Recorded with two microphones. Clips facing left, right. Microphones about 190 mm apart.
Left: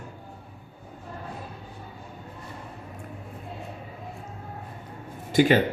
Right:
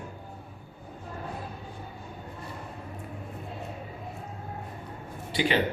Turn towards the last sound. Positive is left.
turn(degrees=45)  # may be behind; listen again after turning